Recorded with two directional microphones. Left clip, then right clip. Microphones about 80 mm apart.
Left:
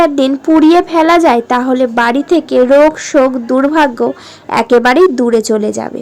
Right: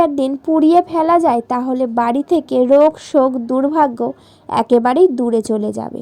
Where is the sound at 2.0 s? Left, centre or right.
Right.